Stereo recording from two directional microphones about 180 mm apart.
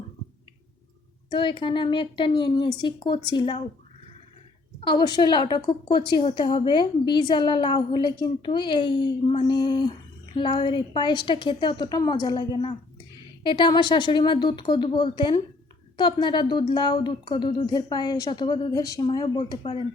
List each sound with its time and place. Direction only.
1.3 s a woman's voice: 30° left (ahead or behind)
4.8 s a woman's voice: 25° left (ahead or behind)